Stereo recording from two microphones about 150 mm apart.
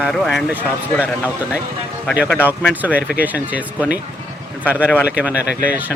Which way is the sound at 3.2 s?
10° right (ahead or behind).